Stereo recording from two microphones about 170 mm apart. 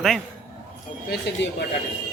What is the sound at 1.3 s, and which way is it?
Speech, 80° left.